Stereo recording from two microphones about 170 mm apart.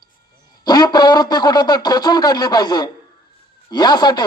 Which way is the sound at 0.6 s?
25° left (ahead or behind).